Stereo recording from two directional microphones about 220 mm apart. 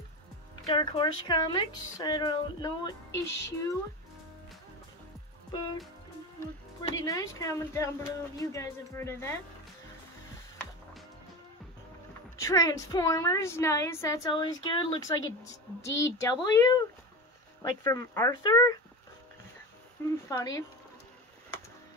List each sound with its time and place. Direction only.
0.7 s a woman's voice: 20° left (ahead or behind)
6.8 s a woman's voice: 15° left (ahead or behind)
12.4 s a woman's voice: 15° left (ahead or behind)
20.2 s a woman's voice: 15° left (ahead or behind)